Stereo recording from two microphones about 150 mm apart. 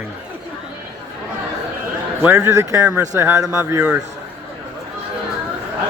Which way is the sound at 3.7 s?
10° right (ahead or behind).